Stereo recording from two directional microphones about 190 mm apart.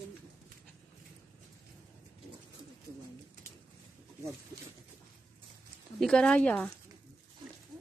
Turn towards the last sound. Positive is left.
turn(degrees=5)  # may be behind; listen again after turning